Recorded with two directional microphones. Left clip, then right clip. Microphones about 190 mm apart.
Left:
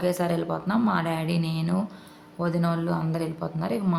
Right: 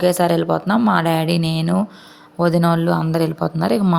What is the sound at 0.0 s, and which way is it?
Speech, 45° right (ahead or behind).